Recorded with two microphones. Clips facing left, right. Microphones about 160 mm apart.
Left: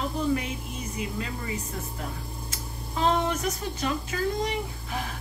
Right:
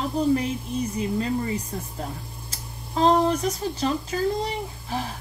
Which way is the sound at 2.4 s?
35° right (ahead or behind).